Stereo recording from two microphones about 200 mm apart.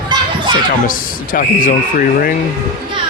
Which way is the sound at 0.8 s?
45° left (ahead or behind).